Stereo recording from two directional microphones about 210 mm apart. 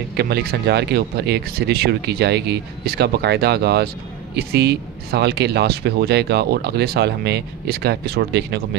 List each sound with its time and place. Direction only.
0.2 s speech: 50° right (ahead or behind)